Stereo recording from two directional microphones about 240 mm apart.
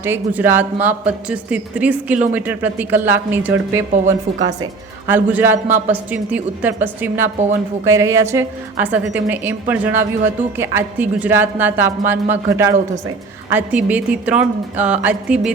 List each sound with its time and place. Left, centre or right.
0.0 s a woman's voice: centre